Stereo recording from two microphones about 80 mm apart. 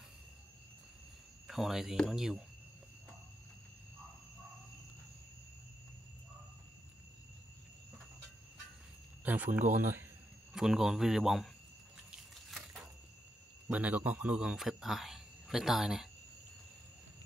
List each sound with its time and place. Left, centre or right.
1.5 s a man's voice: centre
9.2 s speech: right
10.5 s a man's voice: centre
12.1 s a sound: centre
13.7 s a man's voice: centre